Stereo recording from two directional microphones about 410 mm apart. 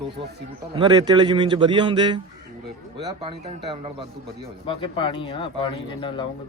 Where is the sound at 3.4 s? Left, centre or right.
Centre.